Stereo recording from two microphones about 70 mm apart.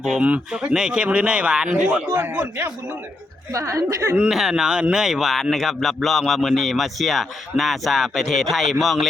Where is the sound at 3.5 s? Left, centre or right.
Right.